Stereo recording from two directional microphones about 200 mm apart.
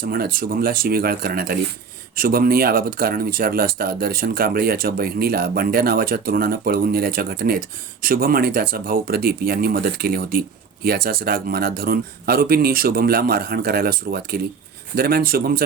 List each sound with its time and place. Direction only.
0.0 s speech: 45° right (ahead or behind)